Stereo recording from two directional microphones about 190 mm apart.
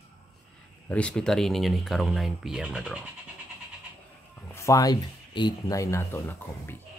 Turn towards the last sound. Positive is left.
turn(degrees=15)  # may be behind; listen again after turning